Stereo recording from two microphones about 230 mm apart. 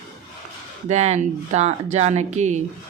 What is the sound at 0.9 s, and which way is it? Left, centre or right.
Speech, right.